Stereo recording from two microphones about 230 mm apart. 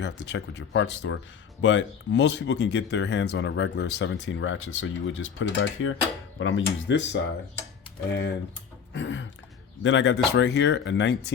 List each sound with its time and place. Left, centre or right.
0.0 s speech: left
8.9 s throat clearing: left
9.8 s speech: left